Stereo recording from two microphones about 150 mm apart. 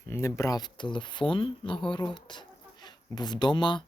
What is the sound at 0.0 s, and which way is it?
Speech, 20° left (ahead or behind).